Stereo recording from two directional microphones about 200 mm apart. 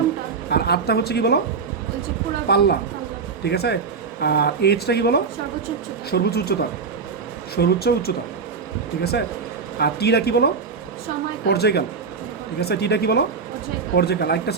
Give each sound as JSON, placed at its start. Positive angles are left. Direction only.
{"t": 0.5, "sound": "speech", "side_deg": 55}
{"t": 2.5, "sound": "speech", "side_deg": 55}
{"t": 9.7, "sound": "speech", "side_deg": 55}